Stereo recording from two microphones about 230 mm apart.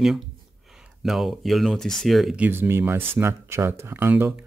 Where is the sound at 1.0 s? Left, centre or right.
Centre.